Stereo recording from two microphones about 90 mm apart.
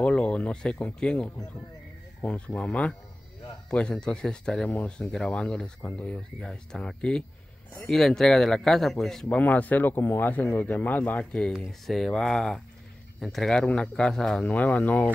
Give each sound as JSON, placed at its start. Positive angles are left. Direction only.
{"t": 0.0, "sound": "speech", "side_deg": 10}
{"t": 9.4, "sound": "speech", "side_deg": 20}